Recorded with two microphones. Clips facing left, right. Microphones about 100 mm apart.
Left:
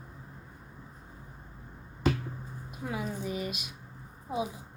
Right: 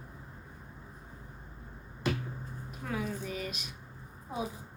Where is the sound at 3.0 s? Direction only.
15° left (ahead or behind).